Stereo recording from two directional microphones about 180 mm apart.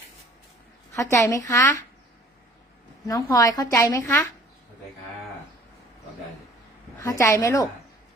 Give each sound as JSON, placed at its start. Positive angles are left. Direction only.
{"t": 0.9, "sound": "speech", "side_deg": 15}
{"t": 3.1, "sound": "a woman's voice", "side_deg": 20}
{"t": 7.0, "sound": "speech", "side_deg": 20}